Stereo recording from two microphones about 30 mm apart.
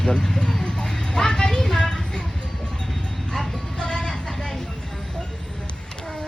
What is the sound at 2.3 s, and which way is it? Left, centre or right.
Music, left.